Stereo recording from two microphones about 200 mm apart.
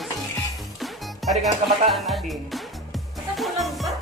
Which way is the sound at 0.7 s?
Centre (ahead or behind).